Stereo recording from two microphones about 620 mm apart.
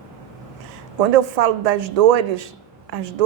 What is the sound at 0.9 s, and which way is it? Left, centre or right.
A woman's voice, right.